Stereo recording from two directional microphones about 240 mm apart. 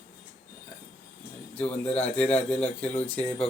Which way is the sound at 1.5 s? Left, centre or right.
Centre.